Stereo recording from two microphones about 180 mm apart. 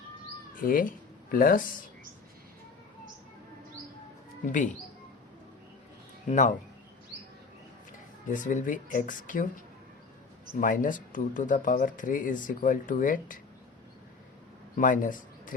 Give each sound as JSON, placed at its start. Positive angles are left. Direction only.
{"t": 0.5, "sound": "speech", "side_deg": 50}
{"t": 4.4, "sound": "speech", "side_deg": 45}
{"t": 6.2, "sound": "speech", "side_deg": 45}
{"t": 8.3, "sound": "speech", "side_deg": 45}
{"t": 10.6, "sound": "speech", "side_deg": 50}
{"t": 14.8, "sound": "speech", "side_deg": 45}